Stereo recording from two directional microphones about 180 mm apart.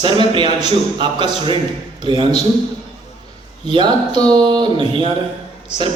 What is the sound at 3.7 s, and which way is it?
Speech, 25° right (ahead or behind).